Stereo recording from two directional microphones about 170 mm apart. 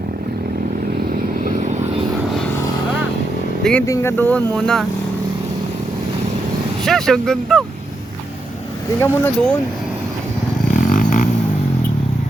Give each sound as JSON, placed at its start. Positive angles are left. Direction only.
{"t": 3.6, "sound": "speech", "side_deg": 5}
{"t": 3.8, "sound": "speech", "side_deg": 15}
{"t": 6.8, "sound": "speech", "side_deg": 5}
{"t": 9.0, "sound": "speech", "side_deg": 10}
{"t": 10.9, "sound": "vehicle", "side_deg": 50}